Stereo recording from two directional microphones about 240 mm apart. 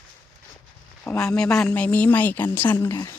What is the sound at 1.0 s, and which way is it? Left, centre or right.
A woman's voice, centre.